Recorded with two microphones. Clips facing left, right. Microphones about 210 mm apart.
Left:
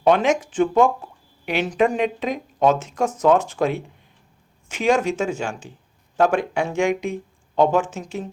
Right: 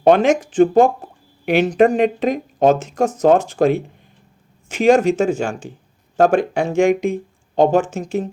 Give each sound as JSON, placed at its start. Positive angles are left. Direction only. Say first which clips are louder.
{"t": 0.0, "sound": "speech", "louder": "right 4 dB", "side_deg": -40}